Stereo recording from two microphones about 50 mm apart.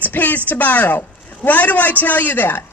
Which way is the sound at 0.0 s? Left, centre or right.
Left.